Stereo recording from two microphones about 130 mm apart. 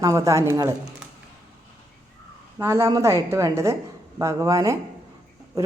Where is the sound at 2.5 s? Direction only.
20° right (ahead or behind).